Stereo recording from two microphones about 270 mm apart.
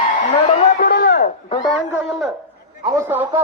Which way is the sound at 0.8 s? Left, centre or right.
Left.